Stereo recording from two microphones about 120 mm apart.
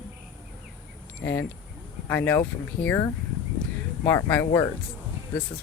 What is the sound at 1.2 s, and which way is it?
Speech, 15° left (ahead or behind).